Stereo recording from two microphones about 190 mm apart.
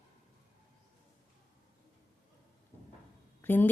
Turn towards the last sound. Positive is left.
turn(degrees=10)  # may be behind; listen again after turning